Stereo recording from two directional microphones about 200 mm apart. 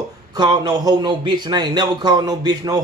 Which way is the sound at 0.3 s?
20° right (ahead or behind).